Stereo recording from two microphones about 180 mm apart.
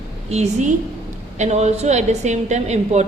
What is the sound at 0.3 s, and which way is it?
A woman's voice, 40° right (ahead or behind).